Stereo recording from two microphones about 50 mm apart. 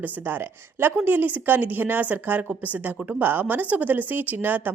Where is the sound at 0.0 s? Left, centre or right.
Right.